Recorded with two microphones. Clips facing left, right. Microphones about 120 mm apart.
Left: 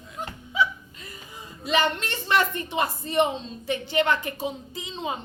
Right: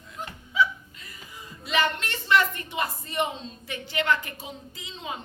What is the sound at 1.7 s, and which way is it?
A woman's voice, 25° left (ahead or behind).